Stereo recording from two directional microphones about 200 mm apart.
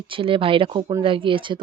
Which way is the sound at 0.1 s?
25° right (ahead or behind).